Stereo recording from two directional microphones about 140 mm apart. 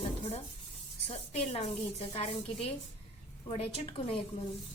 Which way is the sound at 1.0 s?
45° left (ahead or behind).